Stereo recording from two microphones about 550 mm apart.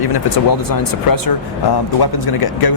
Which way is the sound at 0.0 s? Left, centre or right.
Left.